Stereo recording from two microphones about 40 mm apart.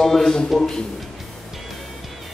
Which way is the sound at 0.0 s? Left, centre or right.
Centre.